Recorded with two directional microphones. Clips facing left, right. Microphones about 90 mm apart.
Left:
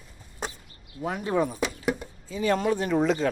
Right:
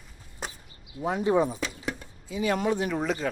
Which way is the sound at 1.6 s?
15° left (ahead or behind).